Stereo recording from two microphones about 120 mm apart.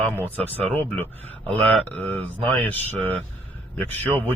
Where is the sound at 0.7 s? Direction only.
15° left (ahead or behind).